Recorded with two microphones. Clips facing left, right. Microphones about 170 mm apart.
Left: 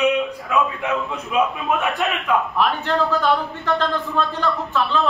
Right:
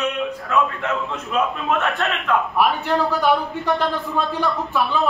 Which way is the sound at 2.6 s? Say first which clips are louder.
Right 1 dB; 10° right (ahead or behind).